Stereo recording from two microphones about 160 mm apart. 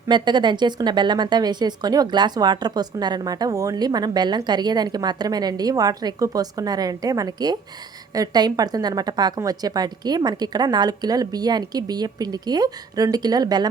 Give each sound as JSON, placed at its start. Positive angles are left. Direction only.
{"t": 0.1, "sound": "speech", "side_deg": -30}